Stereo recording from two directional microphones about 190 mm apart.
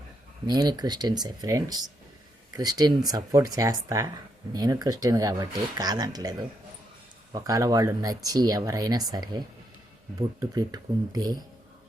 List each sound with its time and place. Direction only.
0.4 s speech: 20° right (ahead or behind)
10.5 s speech: 20° right (ahead or behind)